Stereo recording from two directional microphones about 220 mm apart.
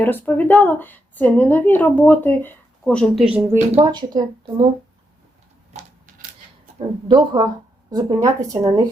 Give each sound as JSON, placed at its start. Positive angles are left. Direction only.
{"t": 0.0, "sound": "a woman's voice", "side_deg": 10}
{"t": 3.9, "sound": "speech", "side_deg": -20}
{"t": 6.7, "sound": "speech", "side_deg": -20}